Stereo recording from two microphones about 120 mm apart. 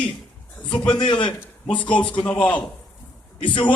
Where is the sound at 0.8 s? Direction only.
40° left (ahead or behind).